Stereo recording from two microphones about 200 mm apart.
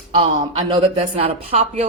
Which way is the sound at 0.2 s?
30° right (ahead or behind).